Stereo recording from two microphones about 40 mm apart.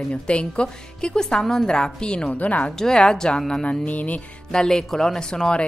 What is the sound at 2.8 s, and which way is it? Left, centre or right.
A woman's voice, centre.